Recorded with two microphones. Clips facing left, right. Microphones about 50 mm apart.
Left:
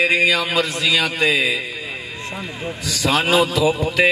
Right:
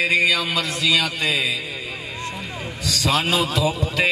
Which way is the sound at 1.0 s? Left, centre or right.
Left.